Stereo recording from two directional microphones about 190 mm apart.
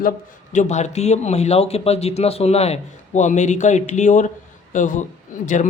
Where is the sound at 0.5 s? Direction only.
40° left (ahead or behind).